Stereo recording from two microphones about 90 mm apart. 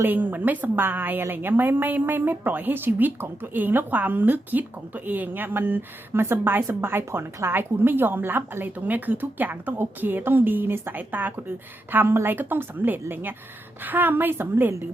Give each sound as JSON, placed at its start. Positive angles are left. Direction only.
{"t": 0.0, "sound": "a woman's voice", "side_deg": -20}